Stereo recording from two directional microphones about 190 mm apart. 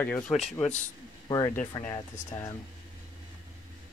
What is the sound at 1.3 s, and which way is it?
Speech, 20° left (ahead or behind).